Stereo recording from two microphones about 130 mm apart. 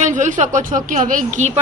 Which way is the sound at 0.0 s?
75° right (ahead or behind).